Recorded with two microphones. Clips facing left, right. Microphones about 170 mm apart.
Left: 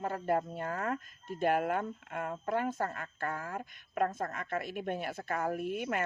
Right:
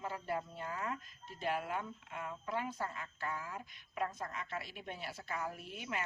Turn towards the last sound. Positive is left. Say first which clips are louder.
# left 9 dB
turn(degrees=55)  # may be behind; listen again after turning